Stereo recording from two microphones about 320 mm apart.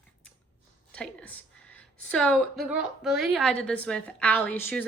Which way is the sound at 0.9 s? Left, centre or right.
Centre.